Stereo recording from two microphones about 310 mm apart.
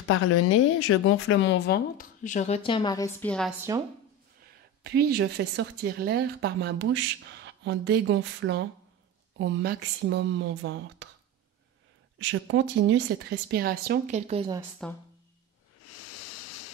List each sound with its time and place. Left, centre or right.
0.1 s speech: left; by 3.5 s centre
4.8 s speech: right
12.2 s speech: right; by 14.6 s centre
14.8 s speech: centre
15.8 s a sound: left